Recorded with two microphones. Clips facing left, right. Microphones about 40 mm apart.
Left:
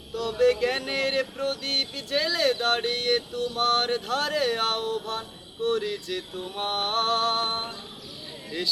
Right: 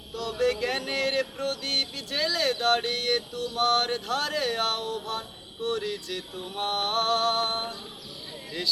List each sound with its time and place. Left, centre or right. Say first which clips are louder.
0.1 s music: left 4 dB; centre
8.4 s speech: left 1 dB; centre